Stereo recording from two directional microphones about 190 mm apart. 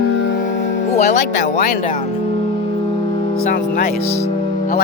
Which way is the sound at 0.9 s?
40° left (ahead or behind).